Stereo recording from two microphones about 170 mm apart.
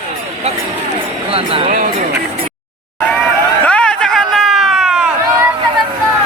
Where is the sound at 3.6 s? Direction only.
5° left (ahead or behind).